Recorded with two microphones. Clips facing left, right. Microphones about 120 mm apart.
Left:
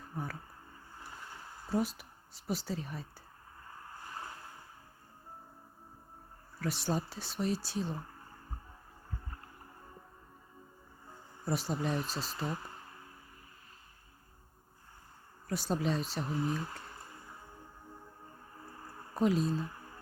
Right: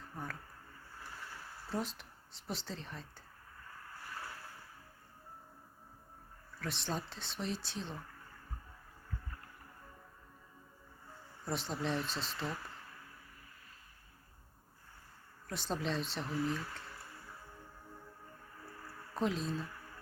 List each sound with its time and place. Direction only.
0.9 s a sound: 20° left (ahead or behind)
1.7 s speech: 5° left (ahead or behind)
3.8 s a sound: 25° left (ahead or behind)
6.6 s speech: 5° left (ahead or behind)
7.9 s music: 30° left (ahead or behind)
11.4 s speech: 5° left (ahead or behind)
12.5 s a sound: 25° left (ahead or behind)
15.4 s speech: 5° left (ahead or behind)
16.3 s speech: 25° left (ahead or behind)
16.9 s music: 25° left (ahead or behind)
18.5 s music: 25° left (ahead or behind)
19.1 s speech: 5° left (ahead or behind)
19.5 s music: 25° left (ahead or behind)